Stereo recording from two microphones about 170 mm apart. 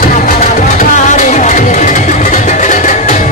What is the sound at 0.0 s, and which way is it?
Music, 50° left (ahead or behind).